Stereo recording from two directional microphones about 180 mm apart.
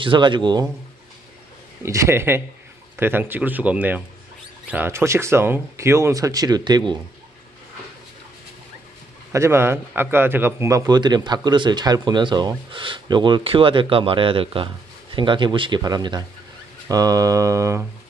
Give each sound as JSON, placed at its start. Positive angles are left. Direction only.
{"t": 0.0, "sound": "a man's voice", "side_deg": -25}
{"t": 1.8, "sound": "speech", "side_deg": -15}
{"t": 9.3, "sound": "a man's voice", "side_deg": -15}